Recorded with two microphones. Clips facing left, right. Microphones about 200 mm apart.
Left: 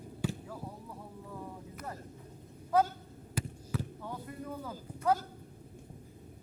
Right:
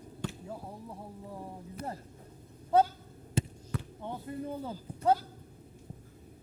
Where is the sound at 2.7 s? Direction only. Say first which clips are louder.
Right 3 dB; 30° right (ahead or behind).